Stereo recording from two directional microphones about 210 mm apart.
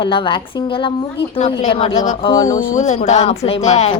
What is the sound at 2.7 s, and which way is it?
Speech, 35° left (ahead or behind).